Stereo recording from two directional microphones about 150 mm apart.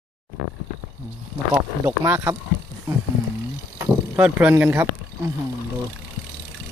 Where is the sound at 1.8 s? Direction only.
15° right (ahead or behind).